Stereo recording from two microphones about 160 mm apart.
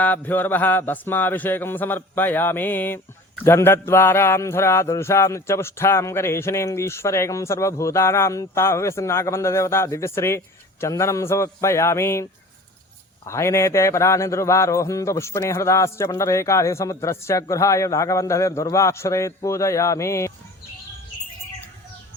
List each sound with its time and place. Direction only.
0.0 s mantra: 10° left (ahead or behind)
13.2 s a man's voice: 15° left (ahead or behind)